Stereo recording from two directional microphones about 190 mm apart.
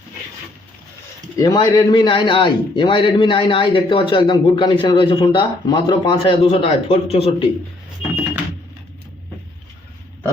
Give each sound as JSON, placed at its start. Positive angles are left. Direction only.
{"t": 1.4, "sound": "a man's voice", "side_deg": 20}